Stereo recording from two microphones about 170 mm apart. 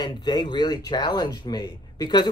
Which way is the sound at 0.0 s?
25° left (ahead or behind).